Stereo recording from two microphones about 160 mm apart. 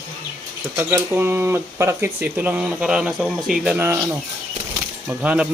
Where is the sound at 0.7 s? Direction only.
15° right (ahead or behind).